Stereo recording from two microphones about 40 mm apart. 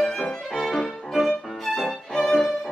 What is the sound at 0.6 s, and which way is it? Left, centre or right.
Music, centre.